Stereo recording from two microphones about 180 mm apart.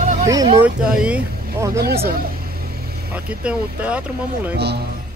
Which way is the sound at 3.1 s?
5° right (ahead or behind).